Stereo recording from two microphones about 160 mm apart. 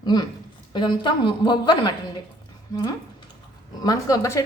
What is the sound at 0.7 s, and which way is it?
A woman's voice, 30° left (ahead or behind).